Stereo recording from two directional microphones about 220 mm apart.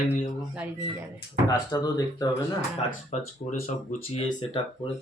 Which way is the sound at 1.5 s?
15° left (ahead or behind).